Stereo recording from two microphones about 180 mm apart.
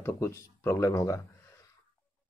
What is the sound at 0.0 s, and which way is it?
Speech, 15° left (ahead or behind).